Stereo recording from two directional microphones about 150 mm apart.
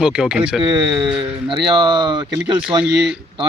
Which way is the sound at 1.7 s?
30° right (ahead or behind).